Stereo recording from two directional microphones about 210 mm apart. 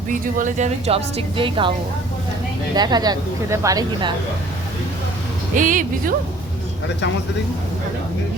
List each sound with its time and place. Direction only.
0.1 s a woman's voice: 40° right (ahead or behind)
2.7 s a woman's voice: 20° right (ahead or behind)
5.5 s a woman's voice: 40° right (ahead or behind)